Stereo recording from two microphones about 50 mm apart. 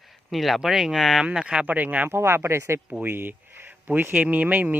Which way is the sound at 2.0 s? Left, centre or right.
Right.